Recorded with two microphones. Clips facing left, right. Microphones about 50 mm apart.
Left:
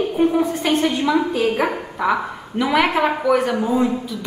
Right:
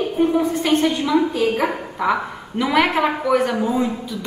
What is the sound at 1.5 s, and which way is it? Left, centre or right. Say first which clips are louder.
A woman's voice: even; centre.